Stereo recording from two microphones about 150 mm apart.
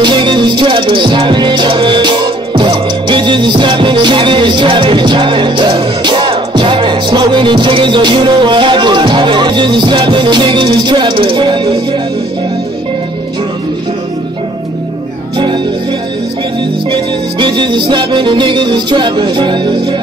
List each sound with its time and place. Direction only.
0.0 s music: 30° right (ahead or behind)
16.9 s music: 30° right (ahead or behind)